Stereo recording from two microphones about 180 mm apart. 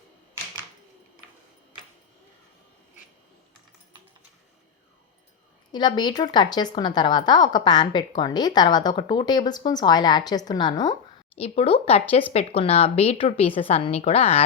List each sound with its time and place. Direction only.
5.7 s a woman's voice: 25° left (ahead or behind)
11.3 s a woman's voice: 35° left (ahead or behind)